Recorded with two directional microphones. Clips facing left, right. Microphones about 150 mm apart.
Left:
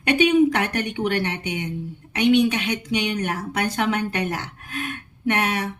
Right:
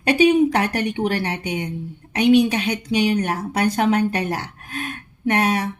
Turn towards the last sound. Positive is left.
turn(degrees=-35)  # may be behind; listen again after turning